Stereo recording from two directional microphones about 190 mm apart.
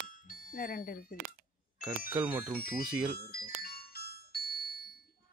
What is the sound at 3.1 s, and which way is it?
Music, 50° left (ahead or behind).